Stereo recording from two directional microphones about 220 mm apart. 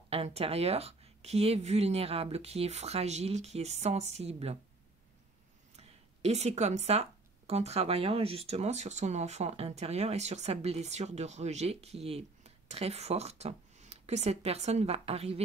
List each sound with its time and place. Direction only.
0.1 s speech: 25° right (ahead or behind)
5.8 s speech: 30° right (ahead or behind)